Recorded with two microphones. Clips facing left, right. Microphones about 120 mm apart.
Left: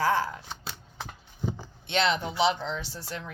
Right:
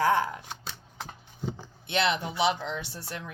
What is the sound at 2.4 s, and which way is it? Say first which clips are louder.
Speech: left 2 dB; 25° left (ahead or behind).